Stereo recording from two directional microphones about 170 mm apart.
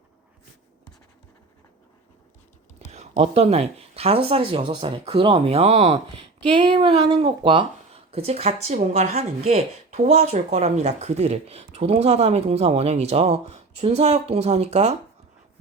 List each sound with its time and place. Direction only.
2.7 s speech: 40° right (ahead or behind)